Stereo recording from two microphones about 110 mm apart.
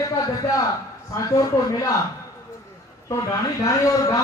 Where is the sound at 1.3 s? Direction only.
30° left (ahead or behind).